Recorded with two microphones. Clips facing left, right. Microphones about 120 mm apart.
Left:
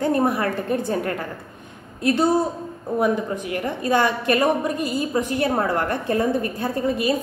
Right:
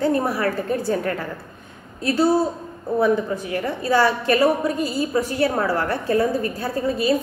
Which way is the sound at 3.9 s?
20° left (ahead or behind).